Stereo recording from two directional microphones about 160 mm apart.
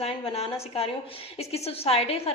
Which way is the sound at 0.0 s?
35° left (ahead or behind).